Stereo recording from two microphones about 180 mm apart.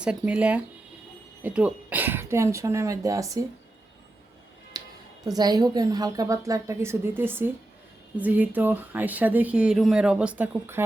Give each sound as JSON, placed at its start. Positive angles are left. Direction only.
{"t": 0.0, "sound": "speech", "side_deg": -5}
{"t": 4.7, "sound": "music", "side_deg": -20}
{"t": 5.2, "sound": "a woman's voice", "side_deg": -20}